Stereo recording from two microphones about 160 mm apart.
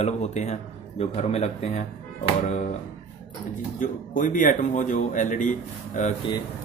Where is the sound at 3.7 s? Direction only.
55° left (ahead or behind).